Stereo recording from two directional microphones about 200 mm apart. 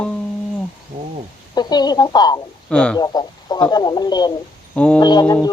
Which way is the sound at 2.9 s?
20° left (ahead or behind).